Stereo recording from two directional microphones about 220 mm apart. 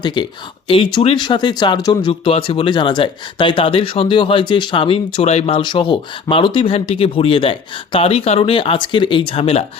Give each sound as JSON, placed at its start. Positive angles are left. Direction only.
{"t": 0.0, "sound": "speech", "side_deg": 20}